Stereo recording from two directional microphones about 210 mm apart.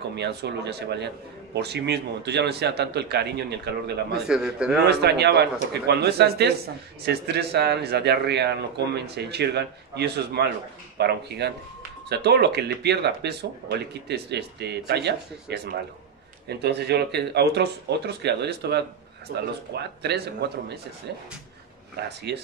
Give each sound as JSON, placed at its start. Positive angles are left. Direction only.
{"t": 0.1, "sound": "speech", "side_deg": -55}
{"t": 4.3, "sound": "a man's voice", "side_deg": -5}
{"t": 4.8, "sound": "speech", "side_deg": -50}
{"t": 22.0, "sound": "speech", "side_deg": -50}